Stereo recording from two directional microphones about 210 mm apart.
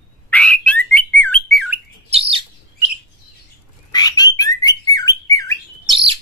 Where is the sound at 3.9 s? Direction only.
20° left (ahead or behind).